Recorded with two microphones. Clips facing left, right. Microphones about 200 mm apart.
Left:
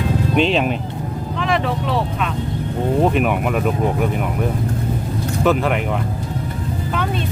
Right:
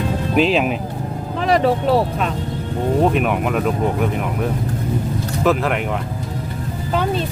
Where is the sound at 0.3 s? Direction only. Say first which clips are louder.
Right 2 dB; 5° right (ahead or behind).